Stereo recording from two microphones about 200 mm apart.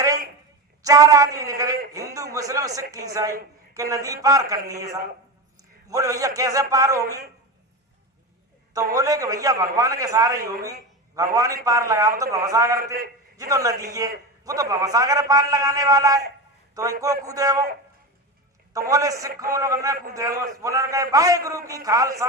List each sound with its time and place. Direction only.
0.8 s a man's voice: 15° right (ahead or behind)
8.7 s a man's voice: 15° right (ahead or behind)
18.9 s a man's voice: 15° right (ahead or behind)